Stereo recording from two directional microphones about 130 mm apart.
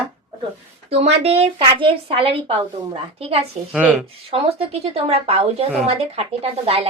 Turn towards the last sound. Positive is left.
turn(degrees=-50)  # may be behind; listen again after turning